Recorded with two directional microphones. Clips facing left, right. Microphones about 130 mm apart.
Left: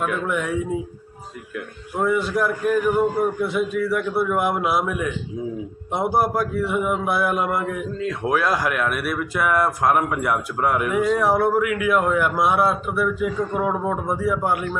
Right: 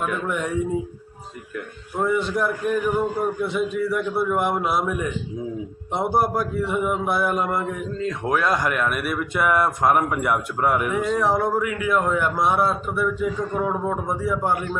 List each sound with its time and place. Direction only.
0.0 s speech: centre (ahead or behind)
2.0 s speech: 5° left (ahead or behind)